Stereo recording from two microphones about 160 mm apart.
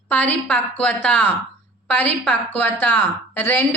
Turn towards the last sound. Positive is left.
turn(degrees=10)  # may be behind; listen again after turning